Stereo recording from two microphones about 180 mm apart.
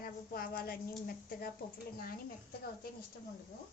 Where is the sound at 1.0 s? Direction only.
55° left (ahead or behind).